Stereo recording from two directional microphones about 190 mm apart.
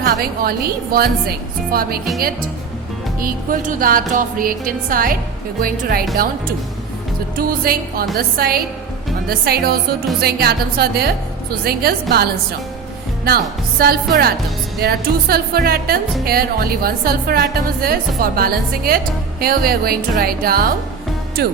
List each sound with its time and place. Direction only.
0.0 s a woman's voice: 55° right (ahead or behind)
1.7 s speech: 50° right (ahead or behind)
3.2 s speech: 50° right (ahead or behind)
7.3 s a woman's voice: 50° right (ahead or behind)